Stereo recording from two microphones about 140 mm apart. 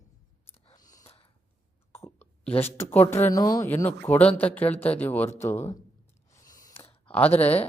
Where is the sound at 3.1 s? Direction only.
20° left (ahead or behind).